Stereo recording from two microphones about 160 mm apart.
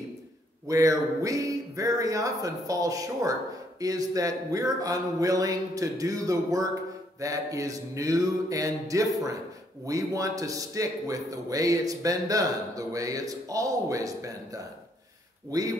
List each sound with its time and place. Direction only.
0.7 s speech: 20° right (ahead or behind)